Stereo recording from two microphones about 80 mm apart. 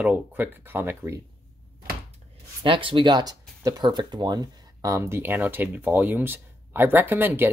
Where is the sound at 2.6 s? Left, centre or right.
Right.